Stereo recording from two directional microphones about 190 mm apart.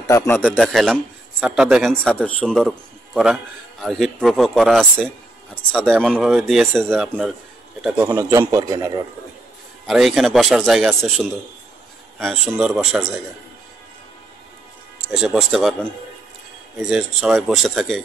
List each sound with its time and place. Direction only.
0.0 s a man's voice: 15° left (ahead or behind)
0.5 s speech: centre (ahead or behind)
3.8 s a man's voice: centre (ahead or behind); by 9.0 s 20° right (ahead or behind)
9.8 s speech: centre (ahead or behind)
15.0 s speech: 5° right (ahead or behind)
16.9 s speech: centre (ahead or behind)